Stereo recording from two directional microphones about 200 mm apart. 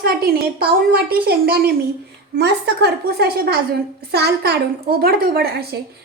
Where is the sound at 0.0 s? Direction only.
50° right (ahead or behind).